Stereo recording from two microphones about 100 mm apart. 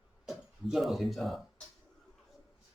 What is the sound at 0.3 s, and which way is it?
Speech, centre (ahead or behind).